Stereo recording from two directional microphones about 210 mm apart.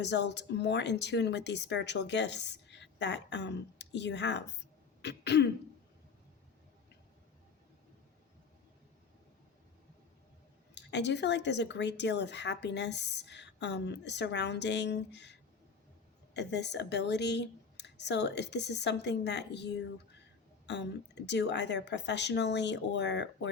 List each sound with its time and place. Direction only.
0.0 s speech: 55° left (ahead or behind)
5.0 s throat clearing: 50° left (ahead or behind)
10.8 s speech: 55° left (ahead or behind)